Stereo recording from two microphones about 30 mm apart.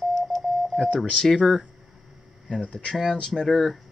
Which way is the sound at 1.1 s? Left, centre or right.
Left.